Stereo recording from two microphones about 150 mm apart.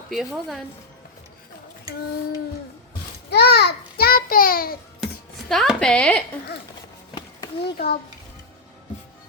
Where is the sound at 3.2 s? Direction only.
90° left.